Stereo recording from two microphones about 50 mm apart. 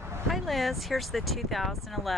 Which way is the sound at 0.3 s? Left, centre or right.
Centre.